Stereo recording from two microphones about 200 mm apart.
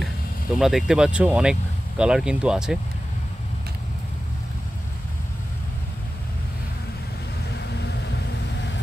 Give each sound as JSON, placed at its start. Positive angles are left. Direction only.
{"t": 0.6, "sound": "speech", "side_deg": 0}
{"t": 7.5, "sound": "vehicle", "side_deg": 55}